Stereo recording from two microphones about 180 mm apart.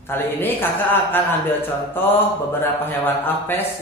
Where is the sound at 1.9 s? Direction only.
10° left (ahead or behind).